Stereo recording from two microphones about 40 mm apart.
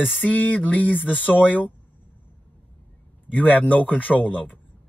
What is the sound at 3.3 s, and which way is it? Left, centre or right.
Speech, left.